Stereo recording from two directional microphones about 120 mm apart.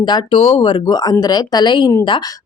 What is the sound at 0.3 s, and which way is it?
Speech, 55° left (ahead or behind).